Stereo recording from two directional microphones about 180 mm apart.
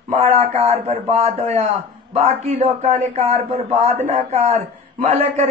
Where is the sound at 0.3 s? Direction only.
35° right (ahead or behind).